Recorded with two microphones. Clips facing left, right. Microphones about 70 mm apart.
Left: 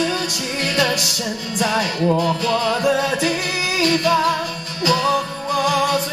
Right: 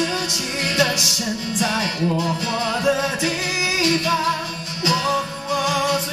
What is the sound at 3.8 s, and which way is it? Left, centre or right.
Music, left.